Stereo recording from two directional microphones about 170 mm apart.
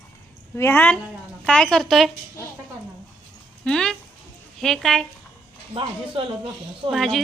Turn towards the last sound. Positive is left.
turn(degrees=0)  # may be behind; listen again after turning